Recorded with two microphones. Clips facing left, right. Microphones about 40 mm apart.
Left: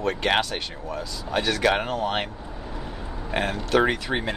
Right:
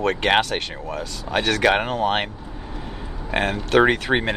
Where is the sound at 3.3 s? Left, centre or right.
Right.